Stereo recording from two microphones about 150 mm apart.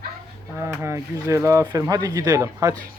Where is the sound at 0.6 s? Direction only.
15° right (ahead or behind).